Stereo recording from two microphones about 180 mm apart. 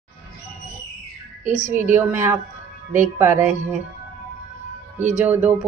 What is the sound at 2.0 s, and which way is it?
A woman's voice, 10° right (ahead or behind).